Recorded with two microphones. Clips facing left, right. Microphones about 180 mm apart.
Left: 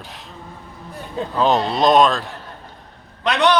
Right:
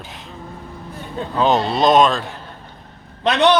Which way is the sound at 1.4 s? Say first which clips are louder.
Right 1 dB; centre (ahead or behind).